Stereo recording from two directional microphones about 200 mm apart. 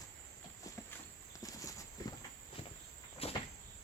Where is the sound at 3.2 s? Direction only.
30° left (ahead or behind).